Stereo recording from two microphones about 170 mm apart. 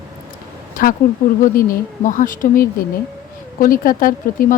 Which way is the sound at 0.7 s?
55° left (ahead or behind).